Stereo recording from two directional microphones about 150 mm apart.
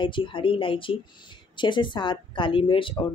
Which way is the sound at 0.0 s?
35° left (ahead or behind).